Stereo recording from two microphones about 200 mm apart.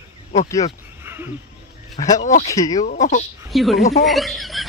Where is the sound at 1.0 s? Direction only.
10° right (ahead or behind).